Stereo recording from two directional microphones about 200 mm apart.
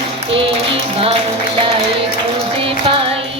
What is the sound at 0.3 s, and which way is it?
Music, 25° right (ahead or behind).